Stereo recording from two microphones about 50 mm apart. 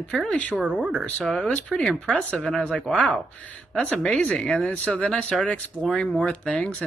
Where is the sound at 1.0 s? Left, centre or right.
Centre.